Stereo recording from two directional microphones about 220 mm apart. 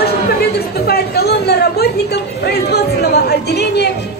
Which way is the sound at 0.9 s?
45° left (ahead or behind).